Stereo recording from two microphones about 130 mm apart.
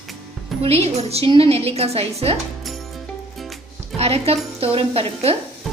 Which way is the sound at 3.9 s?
50° right (ahead or behind).